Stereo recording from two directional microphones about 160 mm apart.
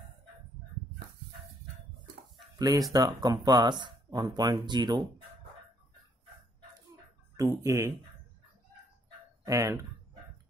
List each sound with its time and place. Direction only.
2.5 s speech: 25° right (ahead or behind)
7.3 s speech: 20° right (ahead or behind)
9.5 s speech: 20° right (ahead or behind)